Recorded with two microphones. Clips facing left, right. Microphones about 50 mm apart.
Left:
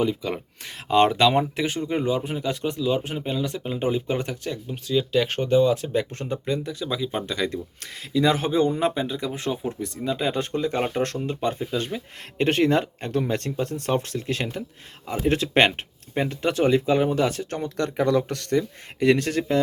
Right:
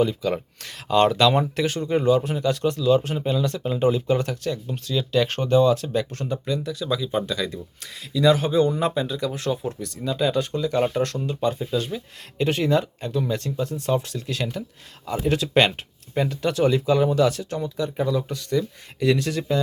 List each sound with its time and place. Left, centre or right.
0.0 s speech: centre
0.9 s speech: left
7.3 s speech: left
14.2 s speech: left
15.0 s speech: left
15.3 s speech: left
17.7 s speech: left
18.5 s speech: left